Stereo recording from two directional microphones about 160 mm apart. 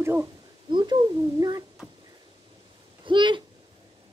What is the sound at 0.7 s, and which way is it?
Speech, 30° right (ahead or behind).